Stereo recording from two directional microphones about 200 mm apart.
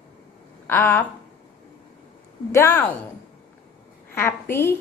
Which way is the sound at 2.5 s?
15° left (ahead or behind).